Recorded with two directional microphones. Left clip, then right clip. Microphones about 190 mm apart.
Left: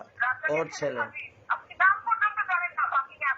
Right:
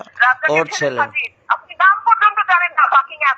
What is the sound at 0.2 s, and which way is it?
Speech, 40° right (ahead or behind).